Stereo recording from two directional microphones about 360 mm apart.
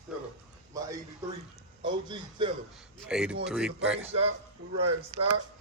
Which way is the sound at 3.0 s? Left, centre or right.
Centre.